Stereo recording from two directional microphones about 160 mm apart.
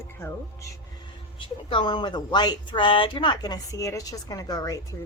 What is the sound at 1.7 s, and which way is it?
Speech, 30° left (ahead or behind).